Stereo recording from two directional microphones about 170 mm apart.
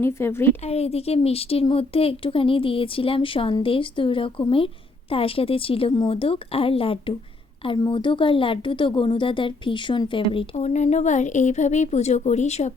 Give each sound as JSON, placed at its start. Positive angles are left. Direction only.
{"t": 0.0, "sound": "a woman's voice", "side_deg": 15}
{"t": 0.7, "sound": "a woman's voice", "side_deg": 35}
{"t": 10.3, "sound": "speech", "side_deg": 40}